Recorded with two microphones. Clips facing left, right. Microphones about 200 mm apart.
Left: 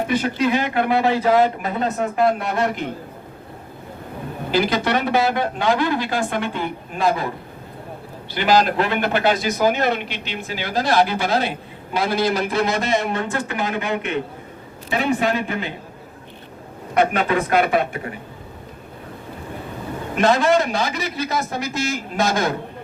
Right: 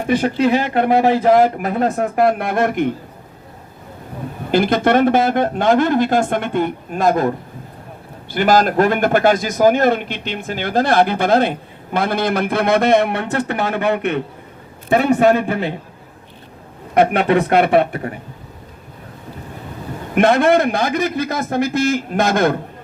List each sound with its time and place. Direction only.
0.2 s speech: 45° right (ahead or behind)
4.5 s speech: 50° right (ahead or behind)
8.3 s speech: 50° right (ahead or behind)
14.8 s speech: 50° right (ahead or behind)
15.4 s a man's voice: 35° right (ahead or behind)
17.1 s speech: 60° right (ahead or behind)
20.1 s speech: 55° right (ahead or behind)